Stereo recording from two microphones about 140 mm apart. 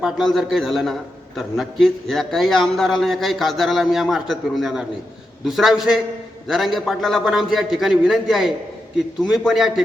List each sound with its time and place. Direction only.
0.0 s a man's voice: centre (ahead or behind)